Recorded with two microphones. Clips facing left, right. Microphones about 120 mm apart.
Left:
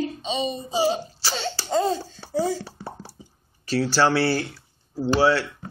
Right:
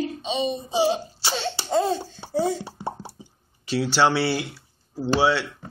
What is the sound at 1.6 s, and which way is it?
Laughter, 5° right (ahead or behind).